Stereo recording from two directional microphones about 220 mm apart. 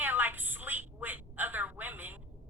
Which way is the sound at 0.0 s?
10° right (ahead or behind).